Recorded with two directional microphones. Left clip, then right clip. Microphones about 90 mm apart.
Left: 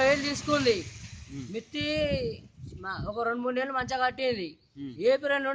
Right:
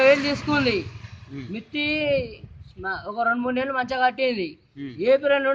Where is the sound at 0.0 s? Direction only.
50° left (ahead or behind).